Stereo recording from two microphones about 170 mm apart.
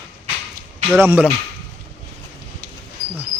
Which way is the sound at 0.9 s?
15° right (ahead or behind).